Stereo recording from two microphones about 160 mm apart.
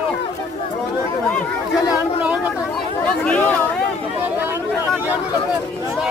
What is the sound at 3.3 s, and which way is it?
Speech, 10° left (ahead or behind).